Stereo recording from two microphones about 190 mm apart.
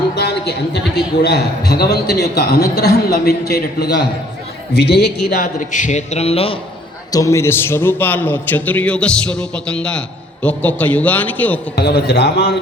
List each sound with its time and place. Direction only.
0.2 s a sound: 60° left (ahead or behind)
1.2 s a man's voice: 60° left (ahead or behind)
5.3 s a man's voice: 40° left (ahead or behind)
7.1 s a man's voice: 15° left (ahead or behind)
11.8 s a man's voice: 55° left (ahead or behind)